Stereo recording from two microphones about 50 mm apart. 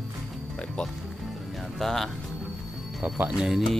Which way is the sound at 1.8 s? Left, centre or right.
Centre.